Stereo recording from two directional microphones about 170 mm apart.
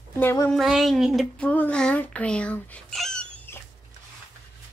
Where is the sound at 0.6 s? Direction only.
Centre (ahead or behind).